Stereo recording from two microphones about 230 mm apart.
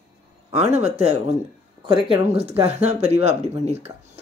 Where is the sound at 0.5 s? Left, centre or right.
Right.